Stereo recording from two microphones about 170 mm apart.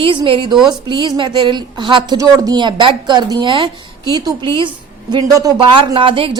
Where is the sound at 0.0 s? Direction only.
30° right (ahead or behind).